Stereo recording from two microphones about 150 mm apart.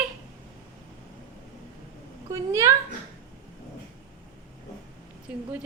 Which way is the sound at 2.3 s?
20° right (ahead or behind).